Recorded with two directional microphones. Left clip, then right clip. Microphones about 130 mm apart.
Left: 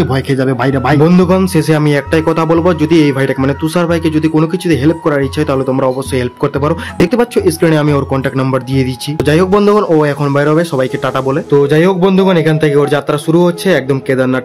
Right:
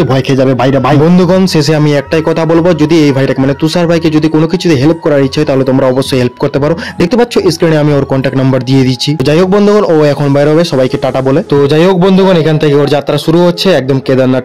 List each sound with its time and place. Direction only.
0.1 s a man's voice: 30° right (ahead or behind)
9.5 s a man's voice: 25° right (ahead or behind)